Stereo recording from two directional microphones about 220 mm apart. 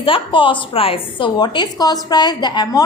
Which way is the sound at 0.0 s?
25° left (ahead or behind).